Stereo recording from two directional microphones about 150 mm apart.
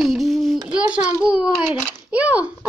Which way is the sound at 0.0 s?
Centre (ahead or behind).